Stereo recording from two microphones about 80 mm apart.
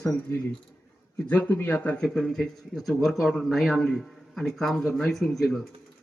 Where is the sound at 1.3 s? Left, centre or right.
Left.